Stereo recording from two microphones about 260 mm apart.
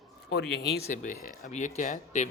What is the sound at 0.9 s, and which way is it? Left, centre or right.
Speech, left.